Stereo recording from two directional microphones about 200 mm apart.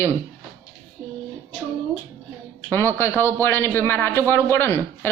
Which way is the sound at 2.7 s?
10° left (ahead or behind).